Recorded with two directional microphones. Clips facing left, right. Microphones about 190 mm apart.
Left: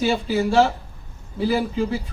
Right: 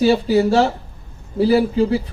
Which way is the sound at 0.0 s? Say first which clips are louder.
Right 6 dB; 35° right (ahead or behind).